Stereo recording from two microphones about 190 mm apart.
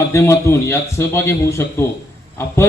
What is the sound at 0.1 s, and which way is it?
A man's voice, 15° left (ahead or behind).